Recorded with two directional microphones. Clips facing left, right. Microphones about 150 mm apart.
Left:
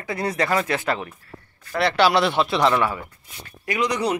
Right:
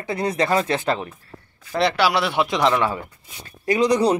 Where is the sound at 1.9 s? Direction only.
10° right (ahead or behind).